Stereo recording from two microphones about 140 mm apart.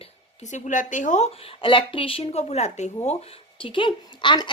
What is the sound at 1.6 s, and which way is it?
Speech, 40° left (ahead or behind).